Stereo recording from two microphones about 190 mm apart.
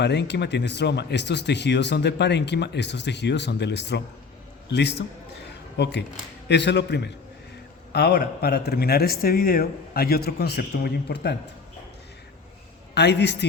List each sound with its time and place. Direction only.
0.0 s speech: 65° left (ahead or behind)
12.9 s speech: 65° left (ahead or behind)